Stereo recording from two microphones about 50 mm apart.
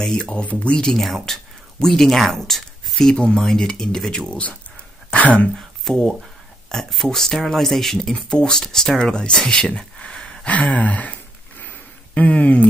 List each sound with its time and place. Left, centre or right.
0.0 s speech: centre
4.3 s speech: left
5.6 s speech: centre
9.9 s a sound: centre
10.4 s a sound: left
12.1 s speech: left